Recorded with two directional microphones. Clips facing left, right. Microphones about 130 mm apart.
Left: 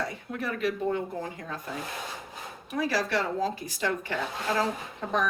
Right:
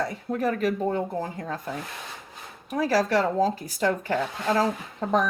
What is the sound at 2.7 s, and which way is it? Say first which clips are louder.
A woman's voice: right 5 dB; 40° right (ahead or behind).